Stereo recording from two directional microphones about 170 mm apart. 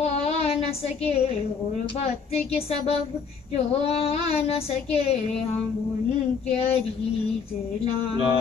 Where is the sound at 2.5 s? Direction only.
35° left (ahead or behind).